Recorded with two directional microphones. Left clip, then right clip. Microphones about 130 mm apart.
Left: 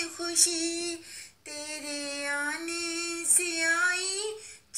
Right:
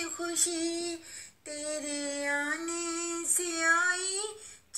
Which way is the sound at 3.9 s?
20° right (ahead or behind).